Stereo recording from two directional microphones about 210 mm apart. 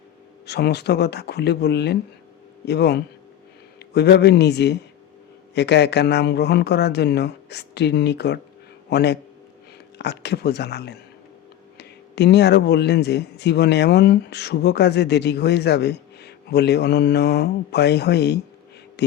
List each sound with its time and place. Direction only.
0.4 s speech: 50° left (ahead or behind)